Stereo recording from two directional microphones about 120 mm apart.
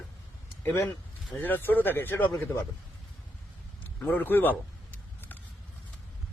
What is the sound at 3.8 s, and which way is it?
Speech, 15° left (ahead or behind).